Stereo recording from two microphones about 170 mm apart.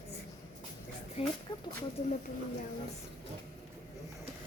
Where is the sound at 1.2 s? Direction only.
35° left (ahead or behind).